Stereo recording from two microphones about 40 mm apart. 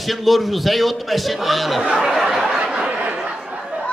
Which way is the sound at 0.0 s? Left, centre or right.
Centre.